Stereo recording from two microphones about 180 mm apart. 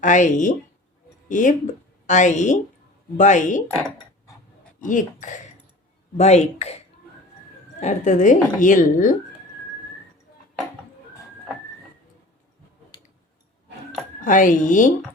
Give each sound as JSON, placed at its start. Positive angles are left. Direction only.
{"t": 0.0, "sound": "speech", "side_deg": 45}
{"t": 4.8, "sound": "speech", "side_deg": 45}
{"t": 14.3, "sound": "speech", "side_deg": 45}